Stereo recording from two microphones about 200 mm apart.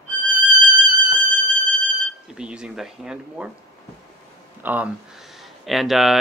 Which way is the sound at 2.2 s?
5° right (ahead or behind).